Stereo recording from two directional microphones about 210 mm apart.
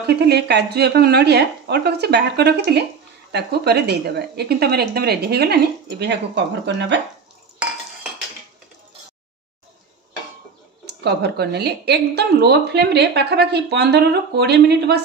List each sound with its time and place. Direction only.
0.0 s a woman's voice: 50° right (ahead or behind)
11.1 s a woman's voice: 50° right (ahead or behind)